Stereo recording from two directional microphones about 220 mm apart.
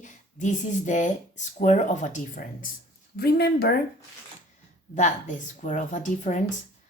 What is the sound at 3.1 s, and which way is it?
Speech, 45° left (ahead or behind).